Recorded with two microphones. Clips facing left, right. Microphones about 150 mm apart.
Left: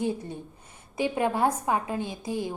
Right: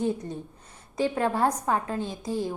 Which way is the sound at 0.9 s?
15° left (ahead or behind).